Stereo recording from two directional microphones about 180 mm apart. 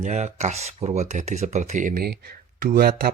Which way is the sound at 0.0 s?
40° right (ahead or behind).